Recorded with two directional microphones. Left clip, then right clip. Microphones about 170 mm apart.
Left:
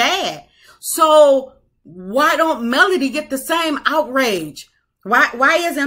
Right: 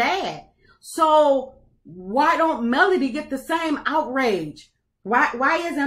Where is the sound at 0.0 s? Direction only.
15° left (ahead or behind).